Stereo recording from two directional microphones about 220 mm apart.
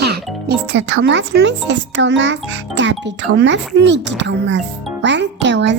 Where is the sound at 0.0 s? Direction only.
50° right (ahead or behind).